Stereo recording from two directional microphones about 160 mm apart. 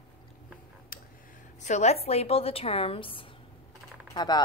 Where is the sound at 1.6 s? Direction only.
45° left (ahead or behind).